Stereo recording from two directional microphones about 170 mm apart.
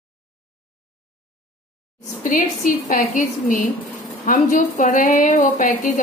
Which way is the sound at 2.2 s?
50° left (ahead or behind).